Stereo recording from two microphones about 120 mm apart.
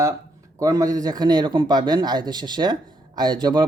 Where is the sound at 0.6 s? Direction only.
30° right (ahead or behind).